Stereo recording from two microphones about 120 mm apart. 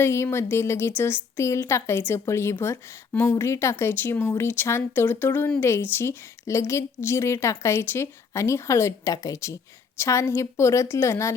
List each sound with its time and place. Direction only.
0.0 s a woman's voice: 20° left (ahead or behind)